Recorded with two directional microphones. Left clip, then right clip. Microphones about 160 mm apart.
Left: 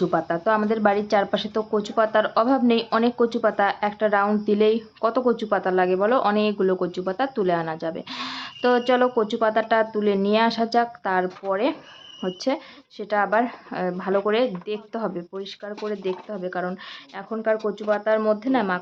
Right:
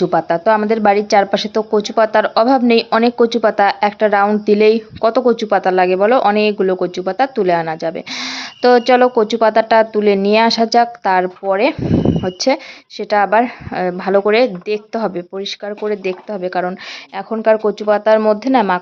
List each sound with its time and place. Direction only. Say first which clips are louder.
0.0 s speech: right 8 dB; 25° right (ahead or behind)